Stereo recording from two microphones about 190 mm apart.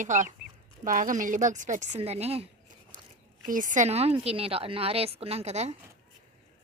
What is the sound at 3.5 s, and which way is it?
Speech, 45° right (ahead or behind).